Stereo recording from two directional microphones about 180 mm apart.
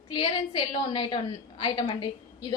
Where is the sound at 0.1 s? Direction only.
25° left (ahead or behind).